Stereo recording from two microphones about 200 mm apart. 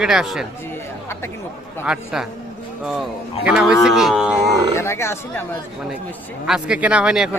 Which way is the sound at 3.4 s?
5° right (ahead or behind).